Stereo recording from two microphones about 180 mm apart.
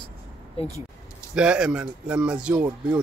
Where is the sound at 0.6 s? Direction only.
30° left (ahead or behind).